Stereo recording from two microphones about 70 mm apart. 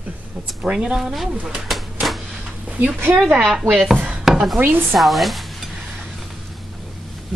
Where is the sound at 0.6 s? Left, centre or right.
Centre.